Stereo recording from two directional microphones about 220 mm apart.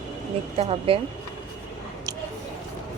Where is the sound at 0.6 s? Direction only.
25° right (ahead or behind).